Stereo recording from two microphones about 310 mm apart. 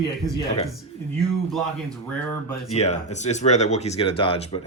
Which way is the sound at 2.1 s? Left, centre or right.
Centre.